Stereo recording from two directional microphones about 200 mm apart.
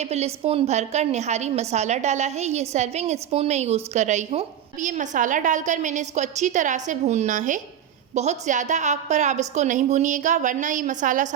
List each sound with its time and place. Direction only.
0.0 s a woman's voice: 30° right (ahead or behind)